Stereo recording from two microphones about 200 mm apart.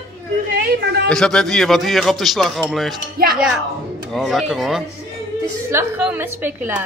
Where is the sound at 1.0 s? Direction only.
5° left (ahead or behind).